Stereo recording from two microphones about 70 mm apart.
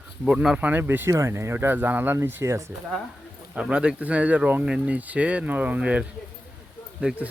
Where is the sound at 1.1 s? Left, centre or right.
Right.